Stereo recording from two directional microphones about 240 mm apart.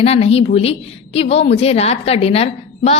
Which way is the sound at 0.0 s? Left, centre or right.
Left.